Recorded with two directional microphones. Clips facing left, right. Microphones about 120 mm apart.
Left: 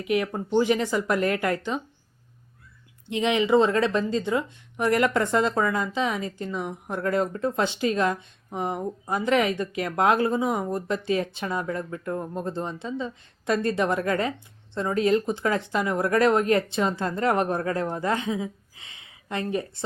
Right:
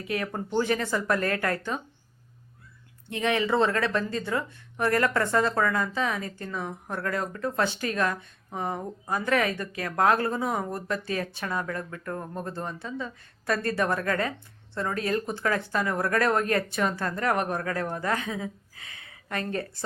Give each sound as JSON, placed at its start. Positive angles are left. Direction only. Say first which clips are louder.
{"t": 0.0, "sound": "speech", "louder": "left 5 dB", "side_deg": 15}
{"t": 3.1, "sound": "speech", "louder": "left 4 dB", "side_deg": 20}